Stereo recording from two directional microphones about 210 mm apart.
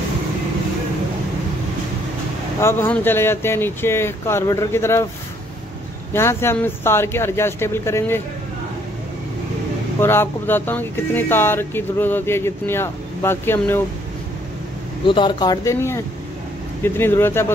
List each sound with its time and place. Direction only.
2.6 s speech: 10° left (ahead or behind)
6.1 s speech: 10° left (ahead or behind)
9.9 s speech: 10° left (ahead or behind)
15.0 s speech: 20° left (ahead or behind)